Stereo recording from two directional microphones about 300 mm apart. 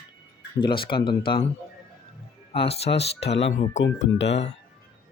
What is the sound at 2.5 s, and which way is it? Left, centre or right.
Speech, centre.